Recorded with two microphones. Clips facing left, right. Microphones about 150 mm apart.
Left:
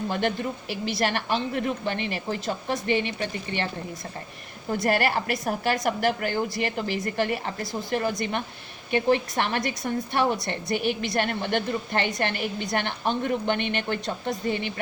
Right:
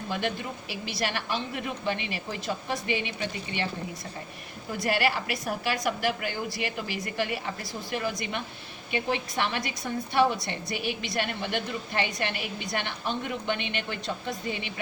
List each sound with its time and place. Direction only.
0.1 s a woman's voice: 50° left (ahead or behind)
4.8 s a woman's voice: 50° left (ahead or behind)